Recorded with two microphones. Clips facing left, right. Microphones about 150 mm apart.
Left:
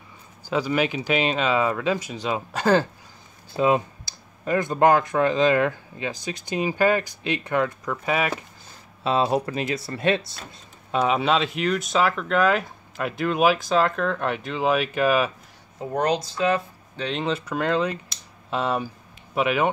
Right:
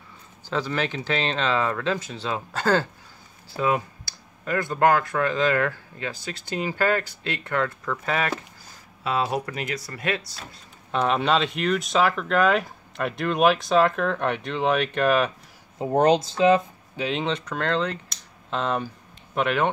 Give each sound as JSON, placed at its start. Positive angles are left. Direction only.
{"t": 0.5, "sound": "speech", "side_deg": 10}
{"t": 9.0, "sound": "speech", "side_deg": 25}
{"t": 10.9, "sound": "speech", "side_deg": 5}
{"t": 15.8, "sound": "speech", "side_deg": -25}
{"t": 17.0, "sound": "speech", "side_deg": 0}